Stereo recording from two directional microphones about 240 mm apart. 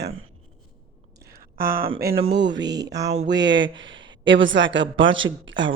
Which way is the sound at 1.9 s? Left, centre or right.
Right.